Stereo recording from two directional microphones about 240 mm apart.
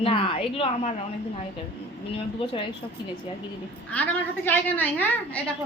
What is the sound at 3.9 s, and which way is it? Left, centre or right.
A woman's voice, centre.